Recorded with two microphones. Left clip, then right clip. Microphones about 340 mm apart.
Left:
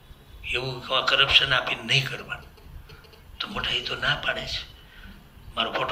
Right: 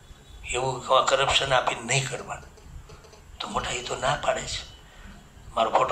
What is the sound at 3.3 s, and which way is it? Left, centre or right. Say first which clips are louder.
A man's voice: left 2 dB; centre.